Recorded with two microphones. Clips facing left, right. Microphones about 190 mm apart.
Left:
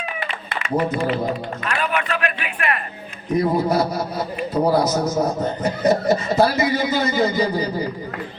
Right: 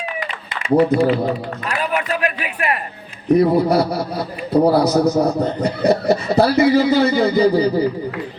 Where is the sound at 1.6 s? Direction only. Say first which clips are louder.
Right 2 dB; 35° right (ahead or behind).